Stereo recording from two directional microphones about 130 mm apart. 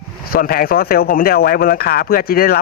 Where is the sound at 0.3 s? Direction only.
90° left.